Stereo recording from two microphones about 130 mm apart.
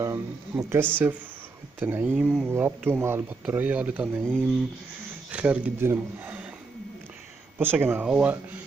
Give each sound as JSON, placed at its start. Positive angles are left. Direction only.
{"t": 0.0, "sound": "speech", "side_deg": -25}
{"t": 4.2, "sound": "speech", "side_deg": 5}
{"t": 5.3, "sound": "speech", "side_deg": -10}
{"t": 7.5, "sound": "speech", "side_deg": -15}